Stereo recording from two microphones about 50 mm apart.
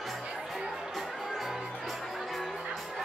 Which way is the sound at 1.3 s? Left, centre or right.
Centre.